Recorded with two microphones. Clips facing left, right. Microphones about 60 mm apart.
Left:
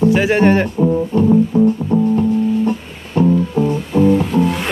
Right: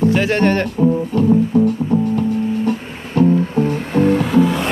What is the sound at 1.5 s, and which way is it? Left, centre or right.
Music, left.